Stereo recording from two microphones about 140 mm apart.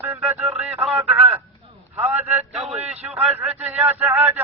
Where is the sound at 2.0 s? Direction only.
10° right (ahead or behind).